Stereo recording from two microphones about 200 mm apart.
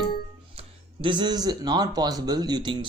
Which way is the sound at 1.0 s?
20° right (ahead or behind).